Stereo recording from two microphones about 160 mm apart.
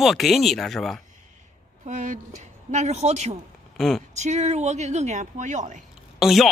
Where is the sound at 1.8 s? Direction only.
50° right (ahead or behind).